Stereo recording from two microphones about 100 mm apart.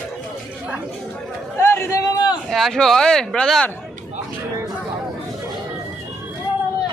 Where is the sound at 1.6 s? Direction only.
25° left (ahead or behind).